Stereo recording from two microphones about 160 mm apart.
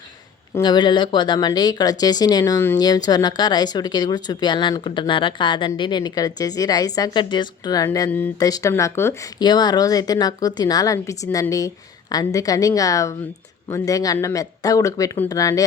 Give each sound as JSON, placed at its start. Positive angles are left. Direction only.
{"t": 0.5, "sound": "speech", "side_deg": 25}